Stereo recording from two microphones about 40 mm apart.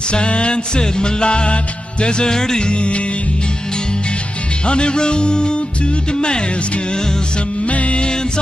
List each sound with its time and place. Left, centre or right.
0.1 s music: left
4.6 s music: left
7.6 s music: left